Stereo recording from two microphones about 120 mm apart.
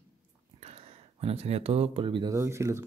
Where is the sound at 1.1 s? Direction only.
55° right (ahead or behind).